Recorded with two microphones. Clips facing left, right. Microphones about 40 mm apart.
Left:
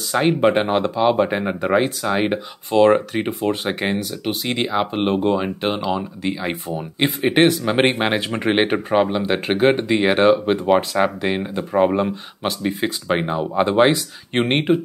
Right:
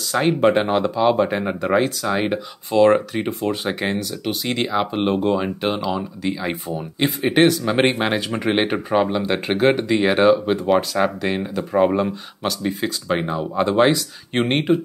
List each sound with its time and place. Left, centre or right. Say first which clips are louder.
0.1 s speech: even; centre
12.4 s speech: left 1 dB; centre